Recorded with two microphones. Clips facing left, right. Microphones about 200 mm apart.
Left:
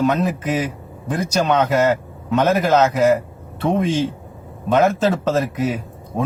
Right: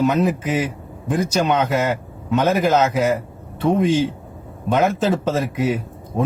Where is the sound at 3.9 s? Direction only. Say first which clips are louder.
Right 2 dB; 60° right (ahead or behind).